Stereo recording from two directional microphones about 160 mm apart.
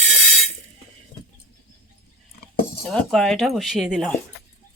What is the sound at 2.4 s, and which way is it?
Dishes, 75° left (ahead or behind).